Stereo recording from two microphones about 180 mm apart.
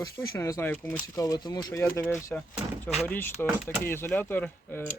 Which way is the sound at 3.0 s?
10° left (ahead or behind).